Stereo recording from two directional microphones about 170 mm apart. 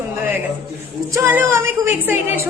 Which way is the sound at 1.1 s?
15° right (ahead or behind).